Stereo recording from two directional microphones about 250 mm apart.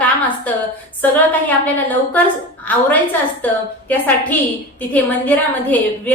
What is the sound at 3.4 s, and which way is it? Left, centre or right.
A woman's voice, centre.